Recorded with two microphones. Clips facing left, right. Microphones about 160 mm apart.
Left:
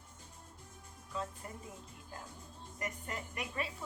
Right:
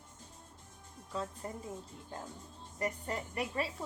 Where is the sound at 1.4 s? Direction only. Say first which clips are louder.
Right 6 dB; 35° right (ahead or behind).